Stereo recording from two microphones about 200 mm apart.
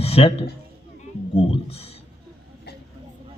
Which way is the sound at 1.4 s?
30° left (ahead or behind).